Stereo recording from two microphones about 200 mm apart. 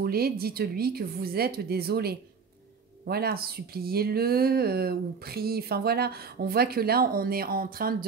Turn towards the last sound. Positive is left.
turn(degrees=-45)  # may be behind; listen again after turning